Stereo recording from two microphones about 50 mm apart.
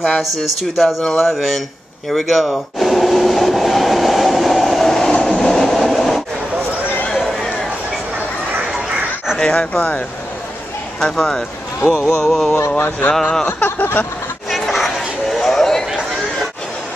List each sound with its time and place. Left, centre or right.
0.0 s speech: centre
2.0 s train: centre
9.4 s speech: left
11.0 s speech: centre
12.7 s speech: left
13.1 s speech: centre
13.5 s speech: left
14.5 s a sound: centre